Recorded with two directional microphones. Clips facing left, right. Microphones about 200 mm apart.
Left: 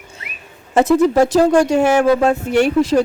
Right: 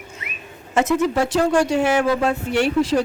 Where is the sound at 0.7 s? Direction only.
35° left (ahead or behind).